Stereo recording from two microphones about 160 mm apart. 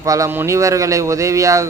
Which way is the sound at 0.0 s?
20° right (ahead or behind).